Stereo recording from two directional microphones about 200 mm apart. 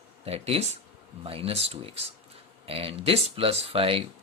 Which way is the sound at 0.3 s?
30° right (ahead or behind).